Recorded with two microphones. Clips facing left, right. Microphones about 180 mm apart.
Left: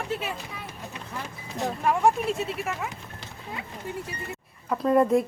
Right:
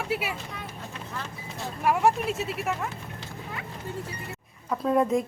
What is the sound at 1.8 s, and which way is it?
Speech, 5° right (ahead or behind).